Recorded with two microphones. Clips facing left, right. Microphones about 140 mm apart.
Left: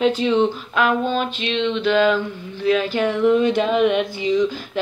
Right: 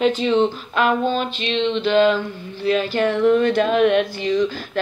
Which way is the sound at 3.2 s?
15° left (ahead or behind).